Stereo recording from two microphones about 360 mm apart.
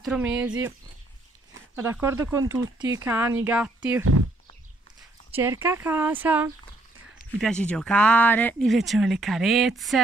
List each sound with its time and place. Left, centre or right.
0.0 s speech: centre
1.8 s speech: centre
5.3 s speech: centre